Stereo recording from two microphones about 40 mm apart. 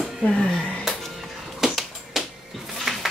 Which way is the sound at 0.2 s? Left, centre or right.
Centre.